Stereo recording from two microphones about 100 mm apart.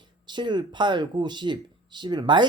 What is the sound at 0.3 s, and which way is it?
Speech, 50° right (ahead or behind).